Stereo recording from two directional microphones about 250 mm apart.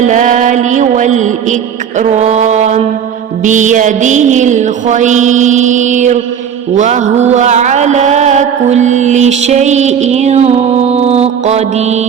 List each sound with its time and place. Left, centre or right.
0.0 s mantra: right
2.0 s a sound: right
3.4 s mantra: right